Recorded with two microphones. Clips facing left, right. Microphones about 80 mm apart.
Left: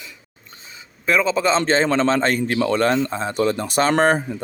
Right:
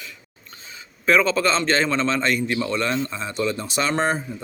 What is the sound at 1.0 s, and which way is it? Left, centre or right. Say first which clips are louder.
Speech: even; centre.